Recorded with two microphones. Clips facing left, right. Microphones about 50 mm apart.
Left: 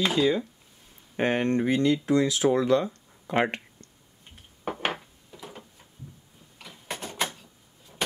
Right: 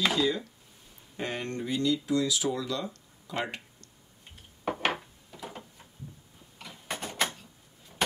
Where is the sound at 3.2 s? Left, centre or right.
Left.